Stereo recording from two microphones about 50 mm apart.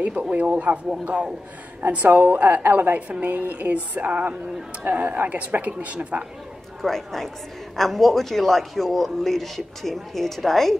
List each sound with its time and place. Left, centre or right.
0.0 s speech: right
1.9 s speech: right
6.8 s a man's voice: centre